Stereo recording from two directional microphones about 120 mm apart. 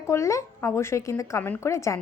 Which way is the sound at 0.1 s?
25° left (ahead or behind).